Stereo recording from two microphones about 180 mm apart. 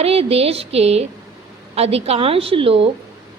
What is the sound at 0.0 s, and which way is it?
A woman's voice, 35° right (ahead or behind).